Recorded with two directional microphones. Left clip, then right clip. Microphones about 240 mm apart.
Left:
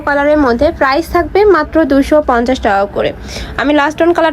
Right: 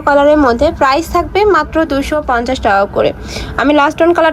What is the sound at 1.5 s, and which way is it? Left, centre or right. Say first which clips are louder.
A woman's voice: left 2 dB; centre.